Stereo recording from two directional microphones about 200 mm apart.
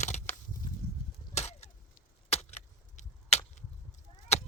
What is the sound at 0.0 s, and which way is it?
Crushing, 35° left (ahead or behind).